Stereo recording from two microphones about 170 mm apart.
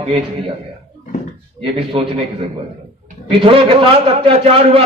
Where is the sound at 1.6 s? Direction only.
30° right (ahead or behind).